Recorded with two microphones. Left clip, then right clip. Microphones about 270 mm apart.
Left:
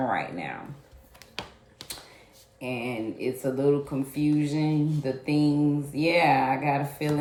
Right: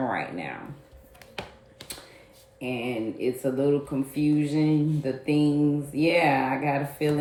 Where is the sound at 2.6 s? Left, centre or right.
Left.